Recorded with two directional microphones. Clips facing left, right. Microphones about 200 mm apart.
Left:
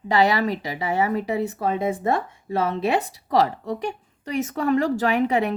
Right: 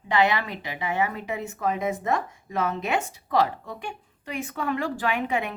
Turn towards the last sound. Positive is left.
turn(degrees=40)  # may be behind; listen again after turning